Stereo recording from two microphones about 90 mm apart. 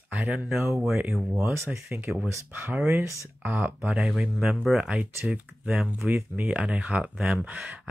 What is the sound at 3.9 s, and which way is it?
Speech, 5° right (ahead or behind).